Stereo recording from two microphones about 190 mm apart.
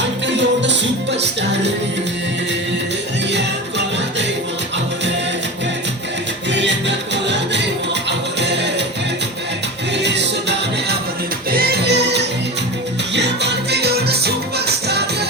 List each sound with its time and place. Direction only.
0.3 s music: 70° right (ahead or behind)
3.3 s music: 65° right (ahead or behind)
6.5 s music: 70° right (ahead or behind)
10.0 s music: 65° right (ahead or behind)
11.5 s music: 55° right (ahead or behind)